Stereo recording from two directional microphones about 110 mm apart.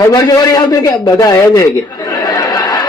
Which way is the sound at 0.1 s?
35° left (ahead or behind).